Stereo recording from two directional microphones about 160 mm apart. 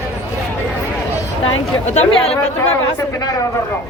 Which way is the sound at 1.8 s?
45° left (ahead or behind).